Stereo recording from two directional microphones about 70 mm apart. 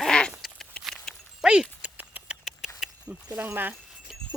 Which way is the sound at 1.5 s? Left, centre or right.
Centre.